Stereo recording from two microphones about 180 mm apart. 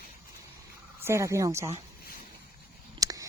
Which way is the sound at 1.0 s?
15° right (ahead or behind).